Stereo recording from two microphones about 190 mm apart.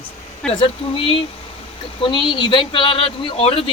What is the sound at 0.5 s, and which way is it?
Speech, 30° left (ahead or behind).